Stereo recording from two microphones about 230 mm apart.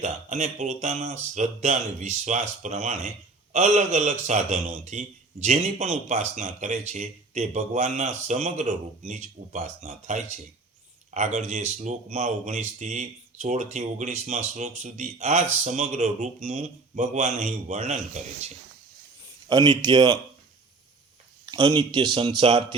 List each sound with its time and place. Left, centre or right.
0.0 s a man's voice: right
19.5 s a man's voice: centre
21.4 s a man's voice: centre